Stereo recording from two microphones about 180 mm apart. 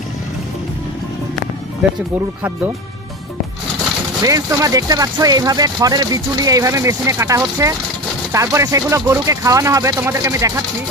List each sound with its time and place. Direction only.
4.2 s speech: 20° right (ahead or behind)